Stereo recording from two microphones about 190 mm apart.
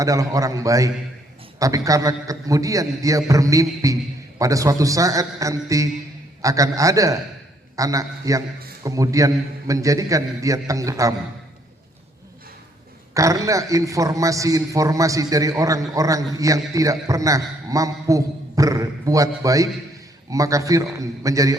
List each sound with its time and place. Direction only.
0.0 s a man's voice: 15° right (ahead or behind)
13.1 s a man's voice: 15° right (ahead or behind)